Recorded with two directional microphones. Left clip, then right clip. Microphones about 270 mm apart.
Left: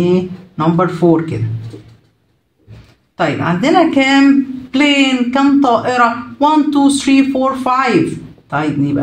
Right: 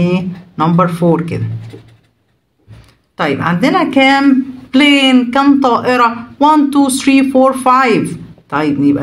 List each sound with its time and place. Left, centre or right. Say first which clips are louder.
0.0 s a man's voice: left 3 dB; right
3.2 s a man's voice: right 1 dB; right